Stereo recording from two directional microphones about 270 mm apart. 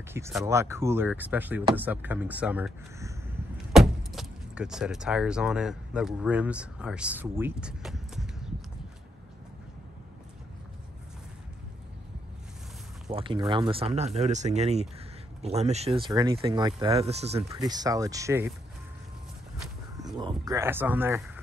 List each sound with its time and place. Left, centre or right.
0.1 s speech: centre
13.1 s speech: centre
20.2 s speech: centre